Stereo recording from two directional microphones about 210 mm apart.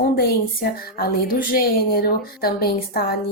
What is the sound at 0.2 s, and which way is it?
A woman's voice, 50° left (ahead or behind).